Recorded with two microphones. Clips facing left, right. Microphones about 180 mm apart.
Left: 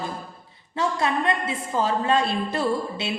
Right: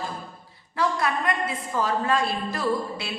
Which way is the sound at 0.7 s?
25° left (ahead or behind).